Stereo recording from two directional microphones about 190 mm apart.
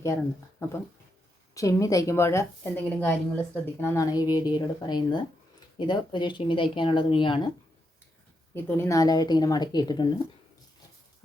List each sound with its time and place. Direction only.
1.5 s a woman's voice: 15° left (ahead or behind)
8.5 s speech: 10° left (ahead or behind)